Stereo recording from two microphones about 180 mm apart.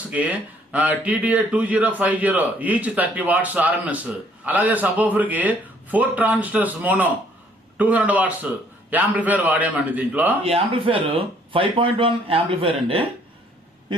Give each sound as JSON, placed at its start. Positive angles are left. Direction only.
{"t": 0.1, "sound": "a man's voice", "side_deg": -5}
{"t": 10.4, "sound": "speech", "side_deg": -30}